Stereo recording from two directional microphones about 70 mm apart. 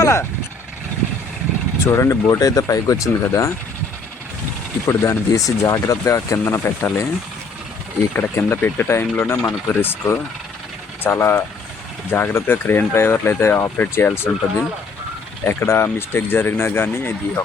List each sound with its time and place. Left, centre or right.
0.0 s speech: left
1.8 s speech: left
4.9 s speech: left
6.4 s speech: left
8.1 s speech: left
15.4 s speech: left